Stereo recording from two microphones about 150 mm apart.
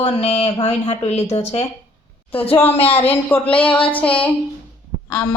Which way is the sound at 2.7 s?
40° left (ahead or behind).